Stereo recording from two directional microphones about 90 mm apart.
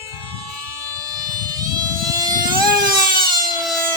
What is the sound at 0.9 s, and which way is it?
Vehicle, 45° right (ahead or behind).